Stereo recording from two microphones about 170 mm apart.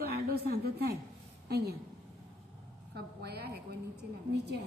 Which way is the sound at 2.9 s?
70° right (ahead or behind).